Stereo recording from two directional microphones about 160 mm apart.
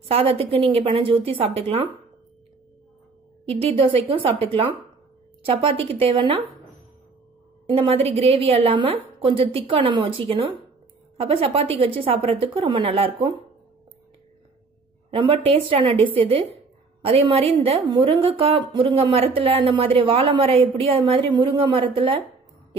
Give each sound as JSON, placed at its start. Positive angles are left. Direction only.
{"t": 0.1, "sound": "a woman's voice", "side_deg": -35}
{"t": 3.4, "sound": "a woman's voice", "side_deg": -40}
{"t": 7.7, "sound": "a woman's voice", "side_deg": -35}
{"t": 15.0, "sound": "a woman's voice", "side_deg": -35}